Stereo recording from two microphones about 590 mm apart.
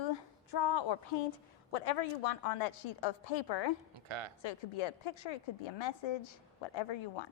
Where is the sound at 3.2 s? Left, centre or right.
Left.